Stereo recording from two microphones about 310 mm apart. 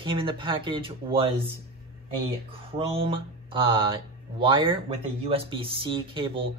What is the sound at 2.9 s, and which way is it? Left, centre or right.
A man's voice, centre.